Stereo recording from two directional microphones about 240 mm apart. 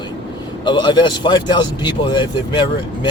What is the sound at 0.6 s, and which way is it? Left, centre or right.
Speech, centre.